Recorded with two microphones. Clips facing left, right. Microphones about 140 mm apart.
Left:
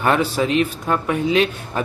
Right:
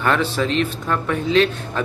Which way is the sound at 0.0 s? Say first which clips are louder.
Left 1 dB; 15° left (ahead or behind).